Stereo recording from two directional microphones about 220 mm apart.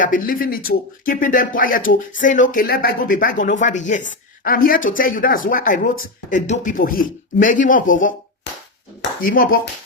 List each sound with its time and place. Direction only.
0.0 s speech: 40° left (ahead or behind)